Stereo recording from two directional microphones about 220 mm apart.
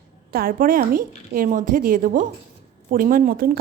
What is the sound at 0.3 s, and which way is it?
A woman's voice, 40° right (ahead or behind).